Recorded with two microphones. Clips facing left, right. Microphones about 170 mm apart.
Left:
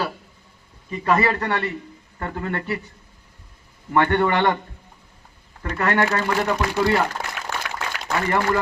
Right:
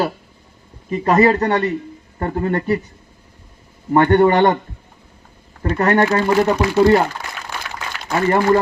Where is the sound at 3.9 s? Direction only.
40° right (ahead or behind).